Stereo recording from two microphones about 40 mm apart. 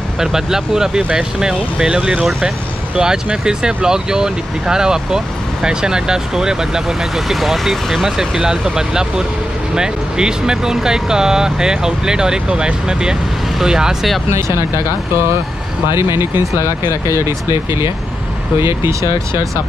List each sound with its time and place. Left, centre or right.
0.2 s speech: centre
3.0 s speech: right; by 8.0 s centre
8.0 s speech: centre
15.9 s speech: right